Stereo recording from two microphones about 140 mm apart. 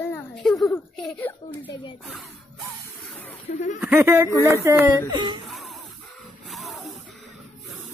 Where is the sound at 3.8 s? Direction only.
15° right (ahead or behind); by 5.3 s 30° right (ahead or behind).